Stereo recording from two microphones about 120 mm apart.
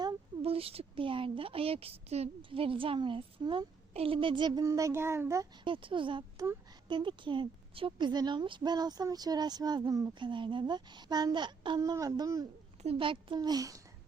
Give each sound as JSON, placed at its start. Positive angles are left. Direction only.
{"t": 0.4, "sound": "a woman's voice", "side_deg": -55}
{"t": 3.4, "sound": "a woman's voice", "side_deg": -35}
{"t": 3.9, "sound": "a child's voice", "side_deg": -50}
{"t": 5.6, "sound": "a woman's voice", "side_deg": -45}
{"t": 6.3, "sound": "speech", "side_deg": -20}
{"t": 6.8, "sound": "a woman's voice", "side_deg": -40}
{"t": 11.8, "sound": "a child's voice", "side_deg": -30}
{"t": 12.8, "sound": "a woman's voice", "side_deg": -50}